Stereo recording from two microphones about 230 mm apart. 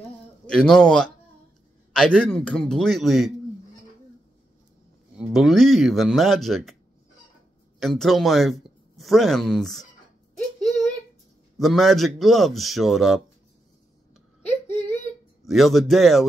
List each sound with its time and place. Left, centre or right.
0.5 s speech: centre
5.1 s speech: centre
7.8 s speech: centre
10.3 s a sound: centre
11.5 s speech: centre
14.8 s a sound: left
15.4 s speech: centre